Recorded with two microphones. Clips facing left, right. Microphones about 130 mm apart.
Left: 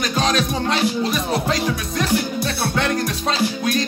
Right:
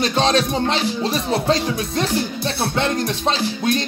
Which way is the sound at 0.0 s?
30° right (ahead or behind).